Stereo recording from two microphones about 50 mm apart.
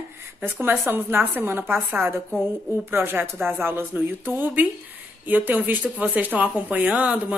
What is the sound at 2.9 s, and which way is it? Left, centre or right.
A woman's voice, right.